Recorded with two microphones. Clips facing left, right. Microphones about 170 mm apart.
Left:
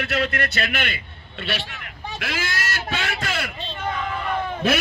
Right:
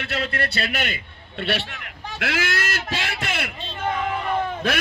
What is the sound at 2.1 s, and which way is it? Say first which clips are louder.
Speech: right 4 dB; 75° right (ahead or behind).